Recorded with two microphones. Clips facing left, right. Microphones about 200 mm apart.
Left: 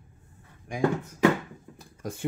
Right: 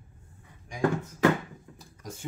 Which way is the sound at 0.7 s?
55° left (ahead or behind).